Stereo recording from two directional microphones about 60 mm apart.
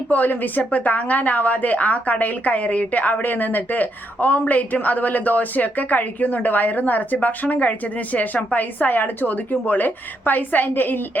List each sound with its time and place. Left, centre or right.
0.1 s a woman's voice: left